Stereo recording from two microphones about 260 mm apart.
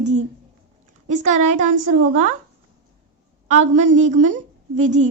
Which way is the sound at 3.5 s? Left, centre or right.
Right.